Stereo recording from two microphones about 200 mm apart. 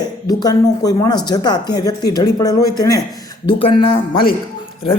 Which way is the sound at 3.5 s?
30° left (ahead or behind).